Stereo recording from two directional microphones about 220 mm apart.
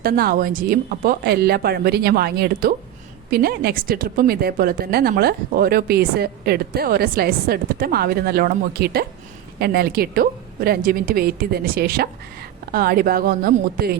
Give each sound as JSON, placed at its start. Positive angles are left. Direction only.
{"t": 0.0, "sound": "a woman's voice", "side_deg": -45}